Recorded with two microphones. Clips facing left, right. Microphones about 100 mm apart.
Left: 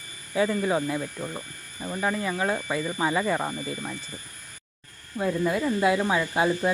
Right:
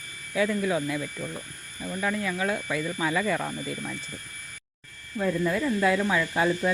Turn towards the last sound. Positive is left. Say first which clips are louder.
# left 1 dB
turn(degrees=25)  # may be behind; listen again after turning